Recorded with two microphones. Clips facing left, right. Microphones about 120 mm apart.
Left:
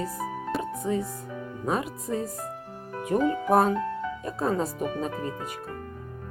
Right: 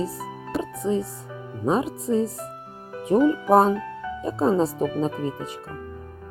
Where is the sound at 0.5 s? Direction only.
Centre (ahead or behind).